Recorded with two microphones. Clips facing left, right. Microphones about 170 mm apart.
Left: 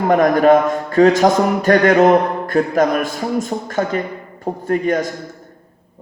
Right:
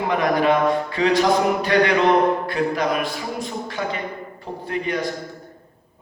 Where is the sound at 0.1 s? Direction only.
45° left (ahead or behind).